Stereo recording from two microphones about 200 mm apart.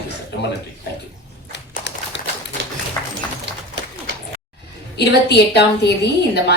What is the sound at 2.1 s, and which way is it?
Typewriter, 60° left (ahead or behind).